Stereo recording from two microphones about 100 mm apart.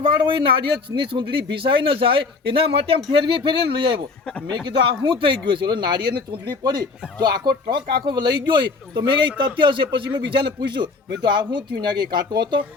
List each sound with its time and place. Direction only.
0.0 s speech: 60° right (ahead or behind)